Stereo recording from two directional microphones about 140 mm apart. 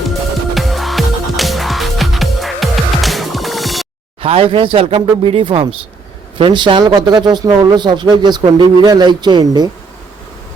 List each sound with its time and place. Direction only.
0.5 s music: centre (ahead or behind)
4.2 s speech: 40° right (ahead or behind)